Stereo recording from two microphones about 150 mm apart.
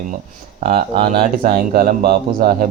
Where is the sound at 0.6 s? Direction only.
40° right (ahead or behind).